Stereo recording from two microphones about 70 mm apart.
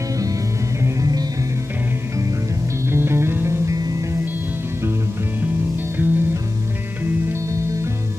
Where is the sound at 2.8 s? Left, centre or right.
Right.